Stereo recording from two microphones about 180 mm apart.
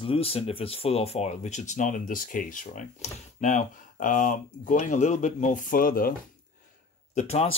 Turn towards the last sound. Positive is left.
turn(degrees=35)  # may be behind; listen again after turning